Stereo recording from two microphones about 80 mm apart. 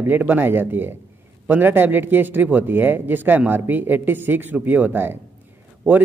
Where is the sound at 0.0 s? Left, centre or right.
Right.